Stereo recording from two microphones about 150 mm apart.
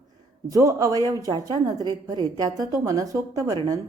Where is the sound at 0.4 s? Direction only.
20° right (ahead or behind).